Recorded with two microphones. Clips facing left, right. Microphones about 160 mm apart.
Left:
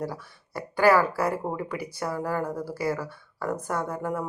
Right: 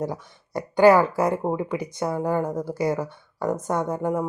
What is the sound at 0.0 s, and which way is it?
Speech, 20° right (ahead or behind).